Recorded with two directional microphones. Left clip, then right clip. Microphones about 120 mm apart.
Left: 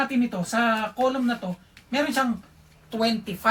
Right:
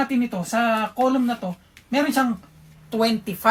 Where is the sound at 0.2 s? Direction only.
25° right (ahead or behind).